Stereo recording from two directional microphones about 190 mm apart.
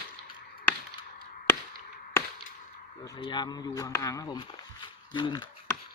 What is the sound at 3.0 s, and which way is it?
A man's voice, 25° left (ahead or behind).